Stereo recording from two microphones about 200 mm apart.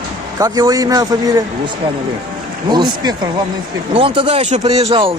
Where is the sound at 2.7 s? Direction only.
20° right (ahead or behind).